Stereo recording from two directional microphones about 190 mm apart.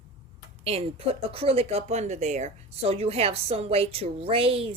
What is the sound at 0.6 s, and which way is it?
Speech, 30° right (ahead or behind).